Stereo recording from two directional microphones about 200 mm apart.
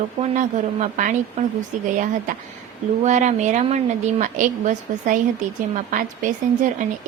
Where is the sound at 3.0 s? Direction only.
35° right (ahead or behind).